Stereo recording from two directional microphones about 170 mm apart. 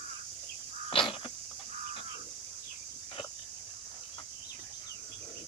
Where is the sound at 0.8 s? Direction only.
30° left (ahead or behind).